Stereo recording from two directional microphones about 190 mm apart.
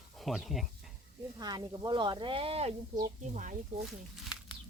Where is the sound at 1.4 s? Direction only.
20° right (ahead or behind); by 3.6 s 40° right (ahead or behind).